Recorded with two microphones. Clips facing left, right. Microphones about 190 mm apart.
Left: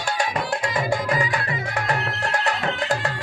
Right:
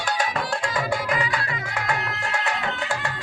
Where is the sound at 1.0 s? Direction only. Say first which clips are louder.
Left 2 dB; 35° left (ahead or behind).